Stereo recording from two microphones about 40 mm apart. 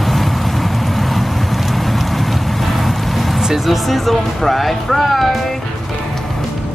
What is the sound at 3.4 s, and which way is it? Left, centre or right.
Speech, centre.